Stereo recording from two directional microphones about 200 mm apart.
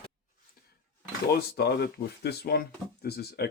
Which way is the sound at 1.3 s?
50° left (ahead or behind).